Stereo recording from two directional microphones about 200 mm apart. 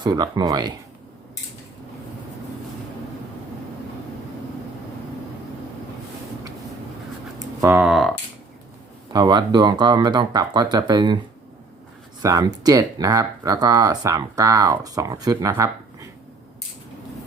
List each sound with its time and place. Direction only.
0.0 s speech: 20° right (ahead or behind)
7.3 s speech: 10° right (ahead or behind)
9.1 s speech: 20° right (ahead or behind)
12.2 s speech: 20° right (ahead or behind)